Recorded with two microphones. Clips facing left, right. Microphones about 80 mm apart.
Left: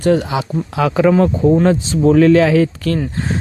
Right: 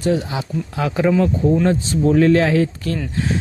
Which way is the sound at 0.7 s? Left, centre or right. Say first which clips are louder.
Left 5 dB; left.